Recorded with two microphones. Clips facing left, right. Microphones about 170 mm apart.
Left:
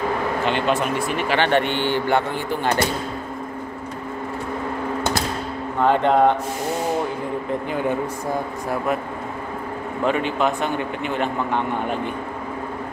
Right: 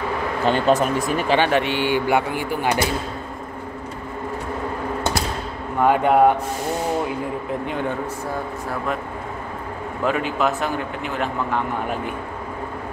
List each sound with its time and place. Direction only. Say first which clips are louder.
0.5 s speech: right 5 dB; 40° right (ahead or behind)
1.4 s speech: even; 5° right (ahead or behind)
5.8 s speech: right 1 dB; 10° right (ahead or behind)
10.0 s speech: even; 5° right (ahead or behind)